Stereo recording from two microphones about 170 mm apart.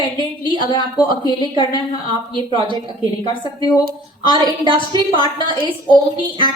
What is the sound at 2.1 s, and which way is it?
A woman's voice, 30° right (ahead or behind).